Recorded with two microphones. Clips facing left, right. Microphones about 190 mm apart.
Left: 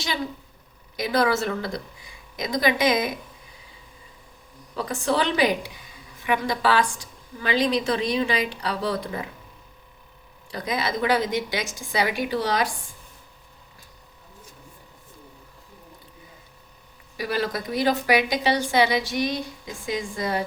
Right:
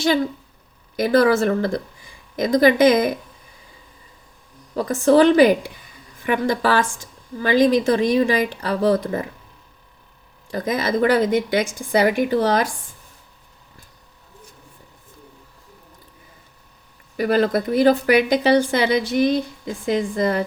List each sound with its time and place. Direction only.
0.9 s speech: 50° right (ahead or behind)
4.7 s speech: 45° right (ahead or behind)
10.5 s speech: 45° right (ahead or behind)
17.2 s speech: 55° right (ahead or behind)